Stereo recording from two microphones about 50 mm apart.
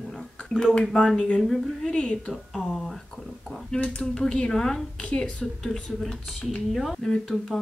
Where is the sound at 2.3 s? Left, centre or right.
Centre.